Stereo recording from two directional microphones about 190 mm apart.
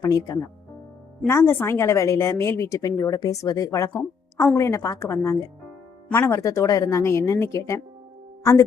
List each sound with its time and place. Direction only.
0.0 s a woman's voice: 20° left (ahead or behind)